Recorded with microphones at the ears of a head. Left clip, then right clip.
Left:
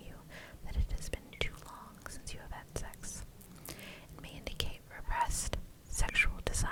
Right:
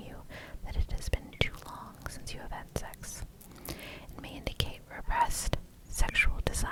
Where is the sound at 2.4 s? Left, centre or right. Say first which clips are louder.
Right 6 dB; right.